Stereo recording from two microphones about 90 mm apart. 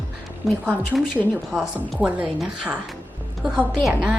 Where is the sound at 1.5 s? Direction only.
5° right (ahead or behind).